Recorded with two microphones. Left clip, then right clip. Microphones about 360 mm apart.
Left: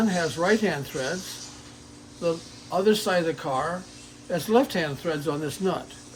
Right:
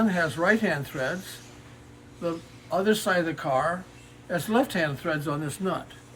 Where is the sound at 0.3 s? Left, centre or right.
Centre.